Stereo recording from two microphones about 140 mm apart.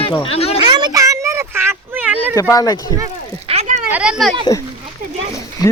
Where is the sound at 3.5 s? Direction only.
50° right (ahead or behind).